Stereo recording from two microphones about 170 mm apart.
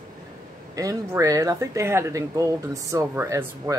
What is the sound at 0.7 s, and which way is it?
Speech, 20° right (ahead or behind).